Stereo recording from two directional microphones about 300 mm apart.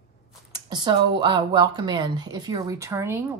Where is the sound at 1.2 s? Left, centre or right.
Centre.